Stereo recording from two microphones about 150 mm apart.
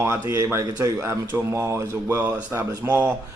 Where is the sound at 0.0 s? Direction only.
20° right (ahead or behind).